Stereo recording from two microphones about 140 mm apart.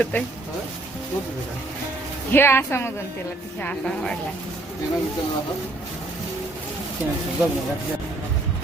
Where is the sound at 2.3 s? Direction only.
15° left (ahead or behind).